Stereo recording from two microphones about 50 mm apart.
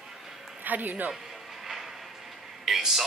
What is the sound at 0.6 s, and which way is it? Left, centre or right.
Speech, right.